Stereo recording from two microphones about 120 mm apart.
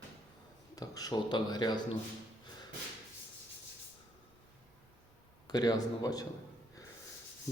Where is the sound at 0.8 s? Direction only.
30° left (ahead or behind).